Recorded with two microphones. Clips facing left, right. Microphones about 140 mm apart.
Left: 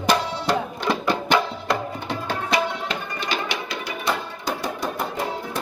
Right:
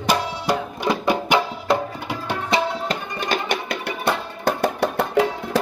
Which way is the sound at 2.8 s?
50° right (ahead or behind).